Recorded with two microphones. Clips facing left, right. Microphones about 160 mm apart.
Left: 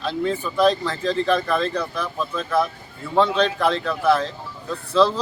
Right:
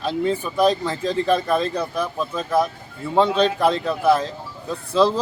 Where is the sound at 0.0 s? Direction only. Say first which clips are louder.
Right 2 dB; 15° right (ahead or behind).